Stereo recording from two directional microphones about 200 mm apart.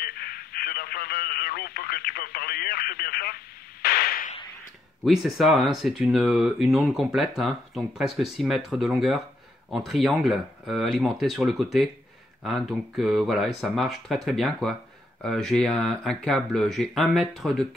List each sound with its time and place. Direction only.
0.0 s speech: 50° left (ahead or behind)
3.8 s a sound: 50° left (ahead or behind)
5.0 s speech: centre (ahead or behind)